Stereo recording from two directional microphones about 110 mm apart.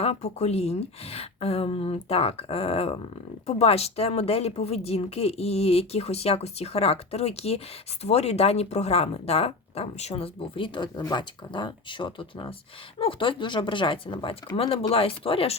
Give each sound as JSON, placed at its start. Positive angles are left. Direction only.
{"t": 0.0, "sound": "speech", "side_deg": 75}